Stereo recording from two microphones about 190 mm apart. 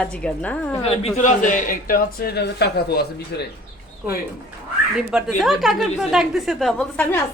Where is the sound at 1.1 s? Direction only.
40° left (ahead or behind); by 3.5 s 60° left (ahead or behind).